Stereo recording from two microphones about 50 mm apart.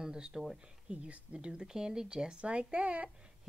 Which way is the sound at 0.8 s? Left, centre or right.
Right.